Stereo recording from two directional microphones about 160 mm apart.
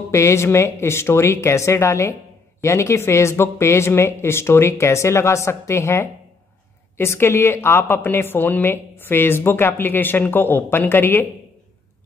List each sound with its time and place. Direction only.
0.1 s a woman's voice: 15° left (ahead or behind)